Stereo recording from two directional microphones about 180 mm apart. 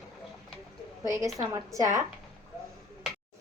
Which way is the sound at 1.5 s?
15° right (ahead or behind).